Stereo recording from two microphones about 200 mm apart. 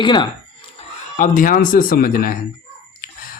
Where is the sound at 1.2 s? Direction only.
45° left (ahead or behind).